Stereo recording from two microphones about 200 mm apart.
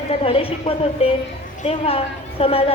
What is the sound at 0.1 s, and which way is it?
A woman's voice, 30° left (ahead or behind).